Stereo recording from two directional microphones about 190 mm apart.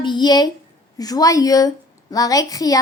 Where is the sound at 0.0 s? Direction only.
25° left (ahead or behind).